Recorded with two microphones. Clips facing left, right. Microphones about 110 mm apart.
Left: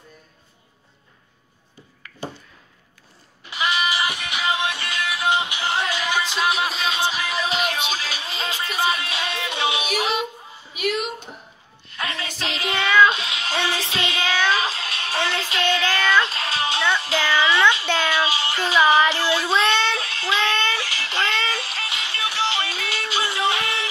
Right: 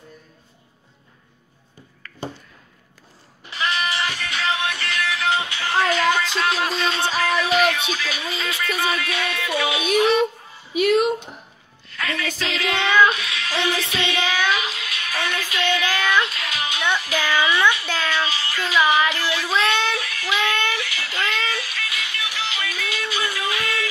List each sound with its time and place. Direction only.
2.0 s a sound: 15° left (ahead or behind)
3.5 s music: 10° left (ahead or behind)
7.4 s music: 30° left (ahead or behind)
11.9 s music: 25° left (ahead or behind)
12.4 s child singing: 30° left (ahead or behind)
13.0 s music: 25° left (ahead or behind)
16.9 s a sound: 30° left (ahead or behind)
17.9 s child singing: 15° left (ahead or behind)
20.7 s music: 30° left (ahead or behind)